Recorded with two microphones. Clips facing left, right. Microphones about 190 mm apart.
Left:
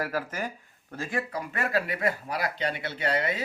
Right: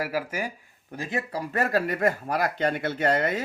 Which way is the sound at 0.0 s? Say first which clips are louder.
Right 2 dB; 10° right (ahead or behind).